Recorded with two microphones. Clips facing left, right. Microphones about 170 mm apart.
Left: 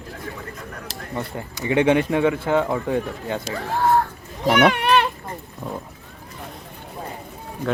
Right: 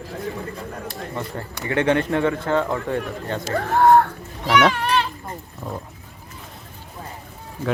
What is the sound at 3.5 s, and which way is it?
Speech, 60° right (ahead or behind).